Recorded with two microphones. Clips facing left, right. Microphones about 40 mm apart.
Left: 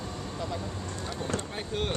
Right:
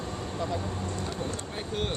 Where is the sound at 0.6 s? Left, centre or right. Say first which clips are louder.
Right 3 dB; right.